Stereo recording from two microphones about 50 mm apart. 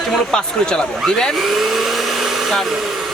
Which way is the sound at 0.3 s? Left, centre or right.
Centre.